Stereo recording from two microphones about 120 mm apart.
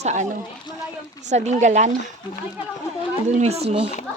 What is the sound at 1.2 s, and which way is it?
Speech, 75° right (ahead or behind).